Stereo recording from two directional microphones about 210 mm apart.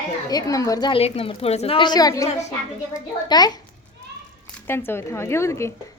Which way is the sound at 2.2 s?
35° left (ahead or behind).